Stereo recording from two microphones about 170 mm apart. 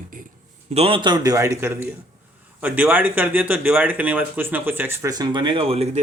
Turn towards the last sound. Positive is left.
turn(degrees=-35)  # may be behind; listen again after turning